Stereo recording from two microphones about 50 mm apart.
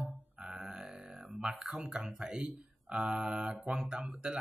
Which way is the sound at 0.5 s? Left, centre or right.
Centre.